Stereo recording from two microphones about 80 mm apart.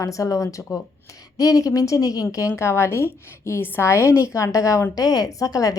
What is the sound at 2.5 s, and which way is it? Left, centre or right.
A woman's voice, left.